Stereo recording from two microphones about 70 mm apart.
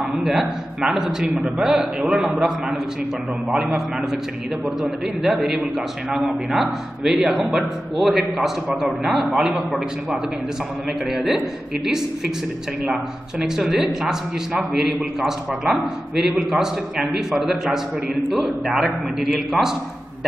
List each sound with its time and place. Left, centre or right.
0.0 s a man's voice: centre
11.1 s a man's voice: centre
12.8 s a man's voice: centre